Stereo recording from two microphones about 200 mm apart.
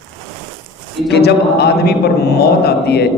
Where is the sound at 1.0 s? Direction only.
55° left (ahead or behind).